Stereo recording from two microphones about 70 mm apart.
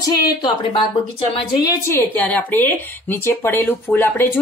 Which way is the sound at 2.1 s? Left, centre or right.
Left.